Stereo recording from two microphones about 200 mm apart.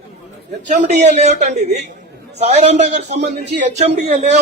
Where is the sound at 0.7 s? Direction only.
35° right (ahead or behind).